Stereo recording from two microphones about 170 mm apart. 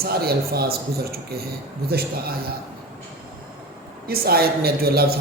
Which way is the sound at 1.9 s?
65° right (ahead or behind).